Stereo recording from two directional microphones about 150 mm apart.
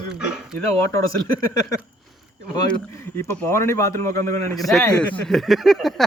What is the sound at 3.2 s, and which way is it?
A man's voice, 20° left (ahead or behind).